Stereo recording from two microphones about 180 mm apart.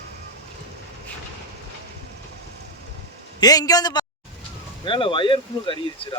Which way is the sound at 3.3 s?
20° left (ahead or behind).